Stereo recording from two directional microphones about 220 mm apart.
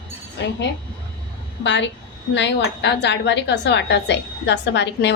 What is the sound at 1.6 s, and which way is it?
Speech, 55° left (ahead or behind).